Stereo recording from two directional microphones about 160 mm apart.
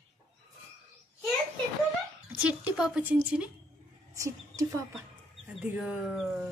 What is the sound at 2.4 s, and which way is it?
A woman's voice, 10° right (ahead or behind).